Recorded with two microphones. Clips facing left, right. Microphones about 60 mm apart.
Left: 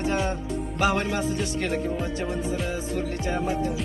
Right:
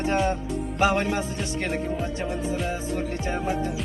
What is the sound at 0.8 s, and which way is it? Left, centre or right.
Music, right.